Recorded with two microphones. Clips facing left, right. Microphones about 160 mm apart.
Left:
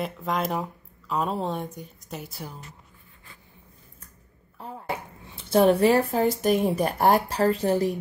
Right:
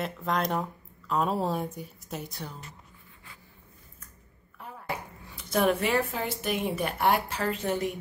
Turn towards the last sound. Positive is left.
turn(degrees=35)  # may be behind; listen again after turning